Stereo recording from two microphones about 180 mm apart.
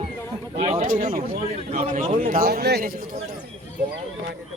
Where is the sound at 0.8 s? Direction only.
50° right (ahead or behind).